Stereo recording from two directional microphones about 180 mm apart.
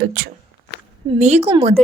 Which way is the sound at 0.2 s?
55° right (ahead or behind).